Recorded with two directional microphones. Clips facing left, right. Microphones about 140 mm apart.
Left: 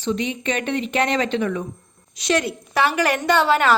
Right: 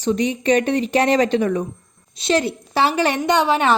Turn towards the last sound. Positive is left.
turn(degrees=-20)  # may be behind; listen again after turning